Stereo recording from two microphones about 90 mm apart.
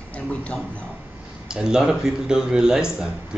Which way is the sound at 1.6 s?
5° right (ahead or behind).